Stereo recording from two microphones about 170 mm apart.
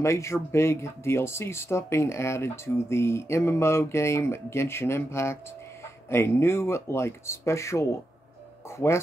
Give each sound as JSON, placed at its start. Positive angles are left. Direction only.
{"t": 0.0, "sound": "speech", "side_deg": 15}